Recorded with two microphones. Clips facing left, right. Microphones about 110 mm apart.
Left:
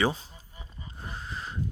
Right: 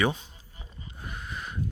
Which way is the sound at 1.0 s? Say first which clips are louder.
Even; 30° left (ahead or behind).